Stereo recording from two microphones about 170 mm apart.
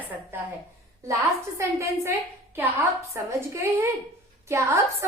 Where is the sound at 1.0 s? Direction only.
15° right (ahead or behind).